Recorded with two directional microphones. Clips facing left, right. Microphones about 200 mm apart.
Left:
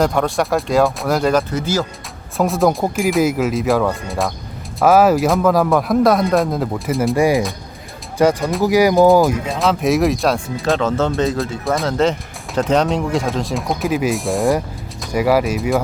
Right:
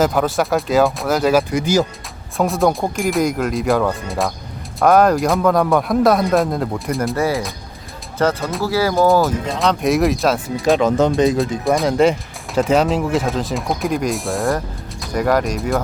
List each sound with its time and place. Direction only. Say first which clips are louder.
0.0 s speech: even; centre (ahead or behind)
2.4 s speech: left 1 dB; centre (ahead or behind)
7.2 s speech: left 4 dB; 15° left (ahead or behind)
9.5 s speech: left 1 dB; centre (ahead or behind)
10.8 s speech: right 3 dB; 15° right (ahead or behind)
11.6 s speech: right 2 dB; centre (ahead or behind)
11.9 s speech: right 2 dB; 10° right (ahead or behind); by 15.8 s 5° left (ahead or behind)